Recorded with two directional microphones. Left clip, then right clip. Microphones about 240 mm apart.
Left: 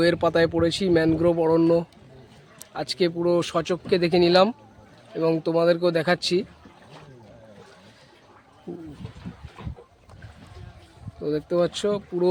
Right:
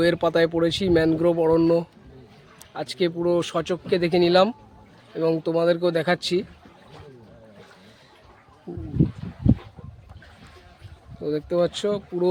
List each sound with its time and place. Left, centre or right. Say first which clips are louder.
0.0 s speech: even; centre
11.2 s speech: even; centre